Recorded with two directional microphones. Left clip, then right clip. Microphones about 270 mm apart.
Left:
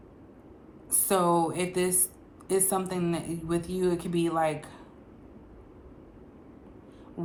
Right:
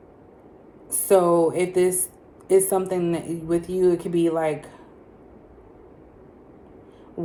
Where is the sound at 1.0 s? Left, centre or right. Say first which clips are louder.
Right 7 dB; centre.